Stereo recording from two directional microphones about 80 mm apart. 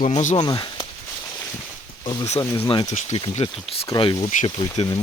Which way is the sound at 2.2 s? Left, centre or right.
Left.